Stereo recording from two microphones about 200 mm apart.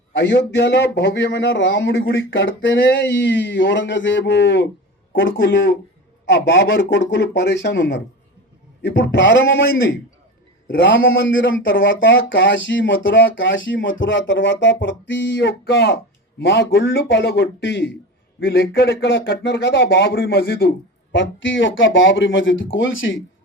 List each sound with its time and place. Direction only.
0.2 s speech: 60° left (ahead or behind)
10.8 s speech: 65° left (ahead or behind)